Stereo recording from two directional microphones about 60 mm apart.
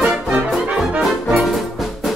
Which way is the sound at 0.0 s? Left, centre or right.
Centre.